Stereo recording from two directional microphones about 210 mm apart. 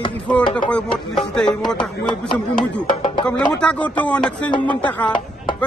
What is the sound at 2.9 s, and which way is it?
Music, 20° left (ahead or behind).